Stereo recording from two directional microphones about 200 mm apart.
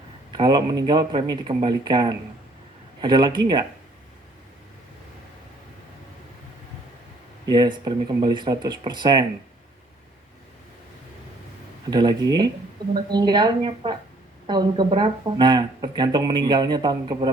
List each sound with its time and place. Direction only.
0.3 s speech: 20° right (ahead or behind)
7.4 s speech: 20° right (ahead or behind)
11.9 s speech: 20° right (ahead or behind)